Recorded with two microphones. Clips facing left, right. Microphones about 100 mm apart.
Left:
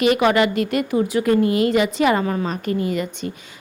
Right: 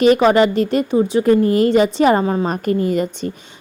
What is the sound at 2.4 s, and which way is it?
Speech, 45° right (ahead or behind).